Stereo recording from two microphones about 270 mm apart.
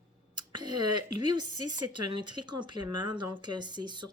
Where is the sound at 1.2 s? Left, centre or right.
Right.